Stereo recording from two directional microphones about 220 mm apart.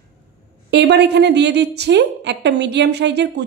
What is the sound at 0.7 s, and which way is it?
Speech, 50° right (ahead or behind).